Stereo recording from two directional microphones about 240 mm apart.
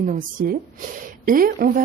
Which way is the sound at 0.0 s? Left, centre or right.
Right.